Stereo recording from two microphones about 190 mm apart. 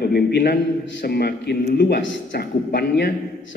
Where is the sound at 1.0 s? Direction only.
55° left (ahead or behind).